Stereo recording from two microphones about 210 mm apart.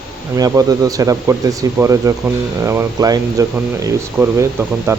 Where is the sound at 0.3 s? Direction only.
15° right (ahead or behind).